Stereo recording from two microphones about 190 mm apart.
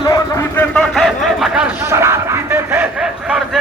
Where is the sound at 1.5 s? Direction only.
10° right (ahead or behind).